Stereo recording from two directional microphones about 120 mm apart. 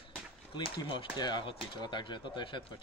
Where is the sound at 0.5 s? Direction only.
45° left (ahead or behind).